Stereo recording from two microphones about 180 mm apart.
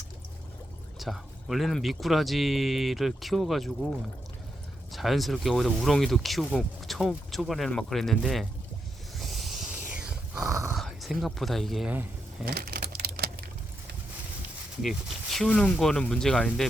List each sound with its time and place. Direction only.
0.9 s speech: centre (ahead or behind)
9.1 s a sound: centre (ahead or behind)
10.4 s a sound: 15° right (ahead or behind)
10.8 s speech: centre (ahead or behind)
12.5 s typing: 60° right (ahead or behind)
14.8 s speech: centre (ahead or behind)